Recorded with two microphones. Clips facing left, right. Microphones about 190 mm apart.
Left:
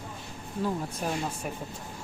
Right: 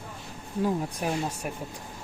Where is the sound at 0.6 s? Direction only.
15° right (ahead or behind).